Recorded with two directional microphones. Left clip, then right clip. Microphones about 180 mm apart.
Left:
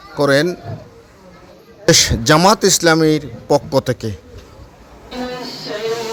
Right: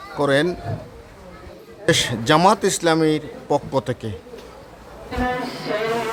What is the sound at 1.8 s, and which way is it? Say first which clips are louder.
Speech: left 6 dB; 30° left (ahead or behind).